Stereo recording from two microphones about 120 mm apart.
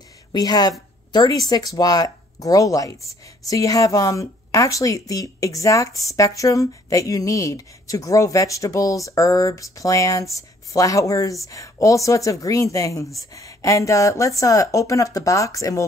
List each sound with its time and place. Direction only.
0.3 s speech: 35° left (ahead or behind)